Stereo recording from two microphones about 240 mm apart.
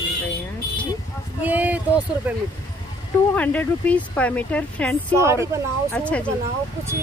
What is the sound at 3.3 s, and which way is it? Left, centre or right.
Speech, centre.